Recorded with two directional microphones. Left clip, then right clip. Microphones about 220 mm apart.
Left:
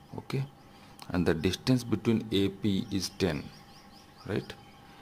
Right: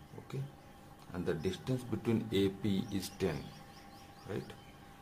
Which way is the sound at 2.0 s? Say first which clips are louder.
Left 2 dB; 30° left (ahead or behind).